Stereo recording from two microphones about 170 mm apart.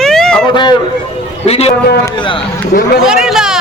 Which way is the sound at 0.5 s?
25° left (ahead or behind).